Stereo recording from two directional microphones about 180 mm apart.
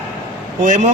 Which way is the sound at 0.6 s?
45° right (ahead or behind).